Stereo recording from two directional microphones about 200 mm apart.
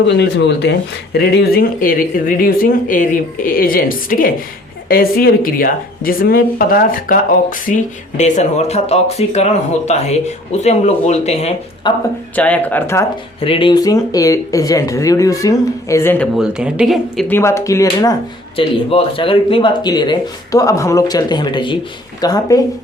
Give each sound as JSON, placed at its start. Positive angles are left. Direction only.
{"t": 0.0, "sound": "a woman's voice", "side_deg": 60}
{"t": 12.4, "sound": "speech", "side_deg": 10}
{"t": 13.4, "sound": "speech", "side_deg": 25}
{"t": 16.3, "sound": "speech", "side_deg": -5}